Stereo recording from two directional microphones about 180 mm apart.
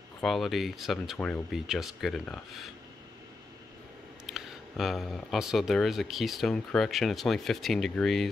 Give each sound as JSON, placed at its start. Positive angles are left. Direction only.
{"t": 0.2, "sound": "speech", "side_deg": 0}
{"t": 4.3, "sound": "speech", "side_deg": 0}